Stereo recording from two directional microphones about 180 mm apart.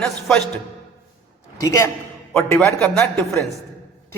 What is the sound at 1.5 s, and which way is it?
Speech, 15° left (ahead or behind).